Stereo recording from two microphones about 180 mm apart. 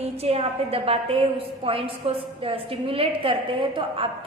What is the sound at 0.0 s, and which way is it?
A woman's voice, 35° right (ahead or behind).